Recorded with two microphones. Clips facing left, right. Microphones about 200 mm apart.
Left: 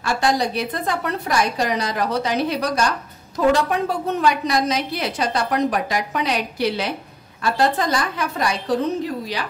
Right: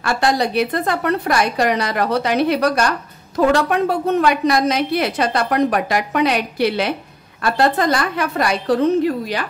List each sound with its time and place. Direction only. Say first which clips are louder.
0.0 s a woman's voice: right 2 dB; 60° right (ahead or behind)